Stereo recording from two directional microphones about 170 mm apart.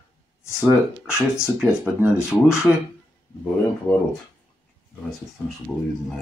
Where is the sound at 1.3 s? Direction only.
5° right (ahead or behind).